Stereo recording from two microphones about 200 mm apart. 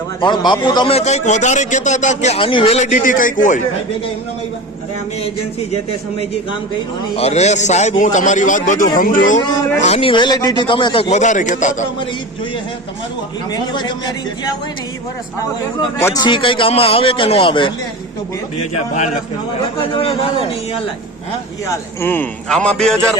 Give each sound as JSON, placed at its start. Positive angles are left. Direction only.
{"t": 0.2, "sound": "a man's voice", "side_deg": 25}
{"t": 7.2, "sound": "a man's voice", "side_deg": 35}
{"t": 9.8, "sound": "speech", "side_deg": 30}
{"t": 13.5, "sound": "speech", "side_deg": 20}
{"t": 16.0, "sound": "speech", "side_deg": 15}
{"t": 18.7, "sound": "a man's voice", "side_deg": 35}
{"t": 22.0, "sound": "a man's voice", "side_deg": 10}